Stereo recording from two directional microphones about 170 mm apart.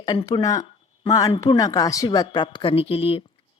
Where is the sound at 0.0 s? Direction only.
25° left (ahead or behind).